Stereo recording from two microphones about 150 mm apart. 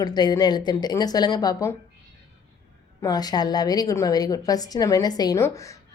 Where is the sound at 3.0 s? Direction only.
25° left (ahead or behind).